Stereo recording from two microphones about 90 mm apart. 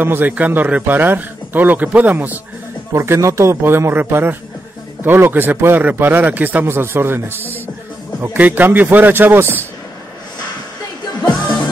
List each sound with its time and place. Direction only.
0.0 s a man's voice: 20° right (ahead or behind)
2.9 s a man's voice: 35° right (ahead or behind)
7.4 s music: 20° left (ahead or behind)
8.2 s a man's voice: 20° right (ahead or behind)